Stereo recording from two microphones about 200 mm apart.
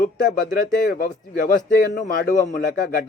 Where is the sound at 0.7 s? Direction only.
45° left (ahead or behind).